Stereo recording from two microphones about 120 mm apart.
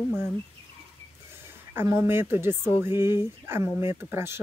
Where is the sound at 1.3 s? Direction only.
20° right (ahead or behind).